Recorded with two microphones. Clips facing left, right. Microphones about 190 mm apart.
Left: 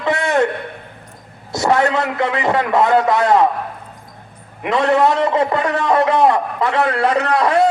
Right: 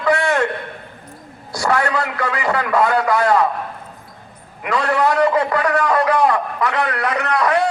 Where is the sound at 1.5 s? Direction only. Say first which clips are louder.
Left 3 dB; 20° left (ahead or behind).